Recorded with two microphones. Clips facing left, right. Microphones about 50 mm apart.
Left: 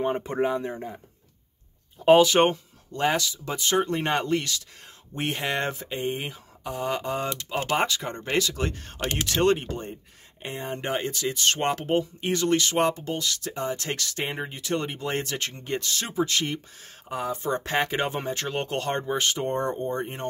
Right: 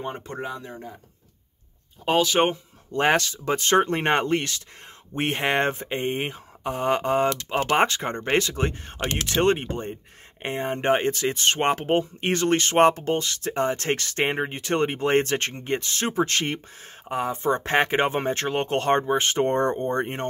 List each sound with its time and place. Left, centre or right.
0.0 s speech: centre
2.0 s speech: centre
2.9 s speech: right
19.3 s speech: right